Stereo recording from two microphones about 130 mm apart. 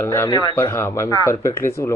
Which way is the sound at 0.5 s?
20° left (ahead or behind).